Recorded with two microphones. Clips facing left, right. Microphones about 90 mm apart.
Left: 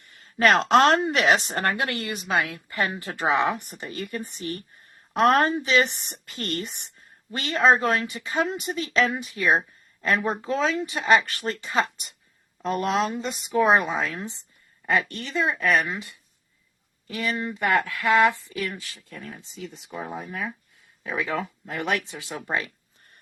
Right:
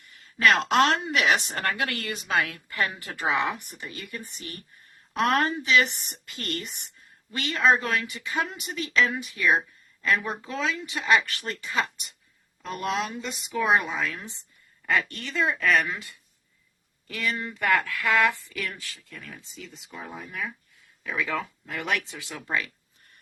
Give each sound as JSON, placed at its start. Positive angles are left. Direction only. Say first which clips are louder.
{"t": 0.1, "sound": "a woman's voice", "louder": "left 2 dB", "side_deg": 40}
{"t": 19.2, "sound": "a woman's voice", "louder": "left 7 dB", "side_deg": 35}